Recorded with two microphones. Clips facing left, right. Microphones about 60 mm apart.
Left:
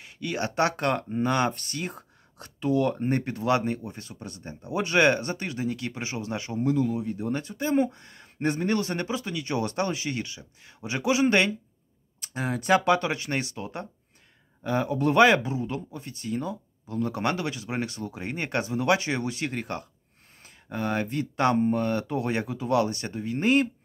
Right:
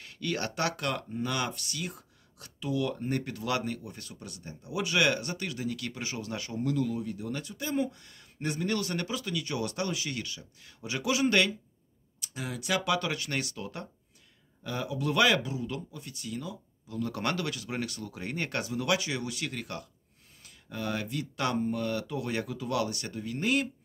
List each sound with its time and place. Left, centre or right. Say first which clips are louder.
0.0 s a sound: left 3 dB; centre
0.6 s speech: left 6 dB; left
12.2 s speech: left 7 dB; left
17.1 s speech: left 2 dB; left